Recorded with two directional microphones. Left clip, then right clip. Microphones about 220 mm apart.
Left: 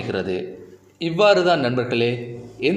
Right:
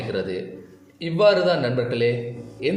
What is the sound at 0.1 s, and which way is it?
A man's voice, 30° left (ahead or behind).